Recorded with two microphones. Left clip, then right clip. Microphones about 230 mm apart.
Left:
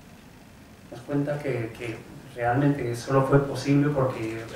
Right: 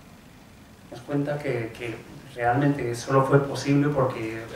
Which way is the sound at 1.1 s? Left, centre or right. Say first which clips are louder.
Right 1 dB; centre.